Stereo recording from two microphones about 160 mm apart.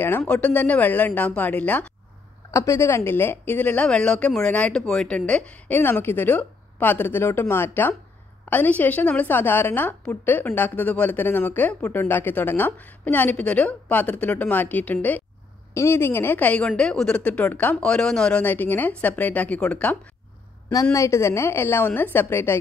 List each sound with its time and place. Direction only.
0.3 s a woman's voice: 10° left (ahead or behind)
20.9 s a woman's voice: 20° left (ahead or behind)